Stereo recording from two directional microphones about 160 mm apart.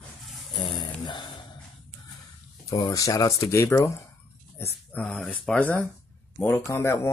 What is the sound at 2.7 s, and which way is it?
Speech, 20° left (ahead or behind).